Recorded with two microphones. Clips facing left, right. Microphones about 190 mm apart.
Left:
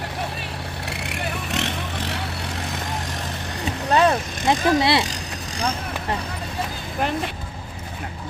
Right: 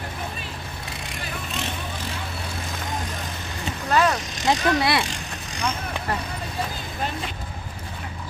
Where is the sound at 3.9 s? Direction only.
25° left (ahead or behind).